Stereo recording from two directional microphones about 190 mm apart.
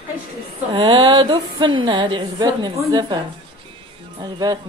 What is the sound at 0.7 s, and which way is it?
A woman's voice, 25° right (ahead or behind).